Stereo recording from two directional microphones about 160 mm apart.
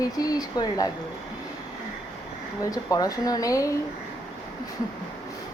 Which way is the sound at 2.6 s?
20° left (ahead or behind).